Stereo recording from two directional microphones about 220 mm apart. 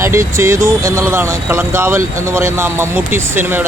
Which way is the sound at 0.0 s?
10° right (ahead or behind).